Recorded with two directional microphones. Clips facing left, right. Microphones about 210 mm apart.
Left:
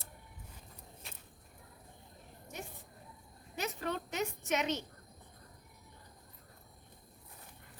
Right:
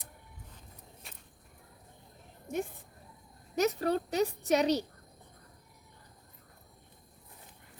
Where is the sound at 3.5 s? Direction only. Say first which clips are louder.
Right 9 dB; 40° right (ahead or behind).